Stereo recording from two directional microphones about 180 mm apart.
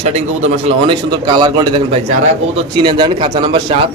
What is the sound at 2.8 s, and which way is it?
Speech, 30° right (ahead or behind).